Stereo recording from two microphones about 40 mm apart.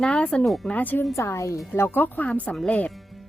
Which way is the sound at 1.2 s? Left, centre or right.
Left.